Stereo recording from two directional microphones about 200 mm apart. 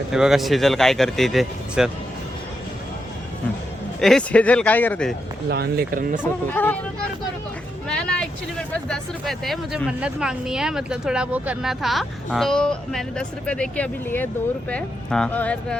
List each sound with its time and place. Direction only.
0.1 s speech: centre (ahead or behind)
4.0 s speech: 5° left (ahead or behind)
5.5 s speech: 50° right (ahead or behind)
6.2 s speech: 10° left (ahead or behind)
7.9 s speech: 5° left (ahead or behind)